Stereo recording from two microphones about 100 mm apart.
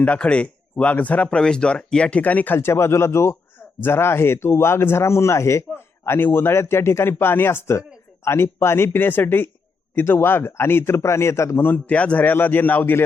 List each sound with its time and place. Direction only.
0.0 s speech: 10° left (ahead or behind)